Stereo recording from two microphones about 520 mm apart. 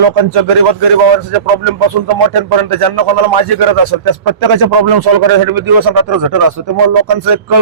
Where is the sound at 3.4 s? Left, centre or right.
Right.